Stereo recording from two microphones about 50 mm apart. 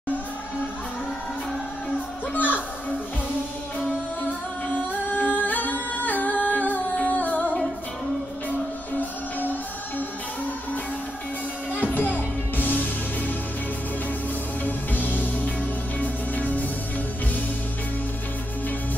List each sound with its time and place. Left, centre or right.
2.3 s music: left
4.2 s singing: left
8.5 s music: left
11.7 s music: left
14.6 s music: left